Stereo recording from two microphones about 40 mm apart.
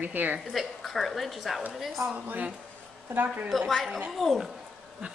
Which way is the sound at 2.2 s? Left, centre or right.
Right.